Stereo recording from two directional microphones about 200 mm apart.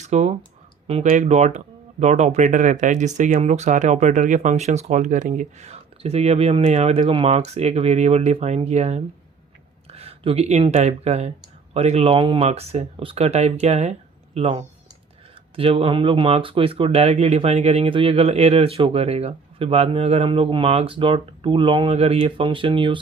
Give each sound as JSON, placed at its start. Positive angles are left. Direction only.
{"t": 0.0, "sound": "speech", "side_deg": -35}